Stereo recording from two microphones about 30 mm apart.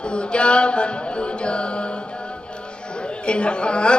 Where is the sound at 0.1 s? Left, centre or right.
Left.